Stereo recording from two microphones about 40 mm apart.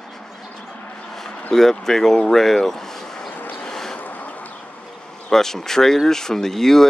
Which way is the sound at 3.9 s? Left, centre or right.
Left.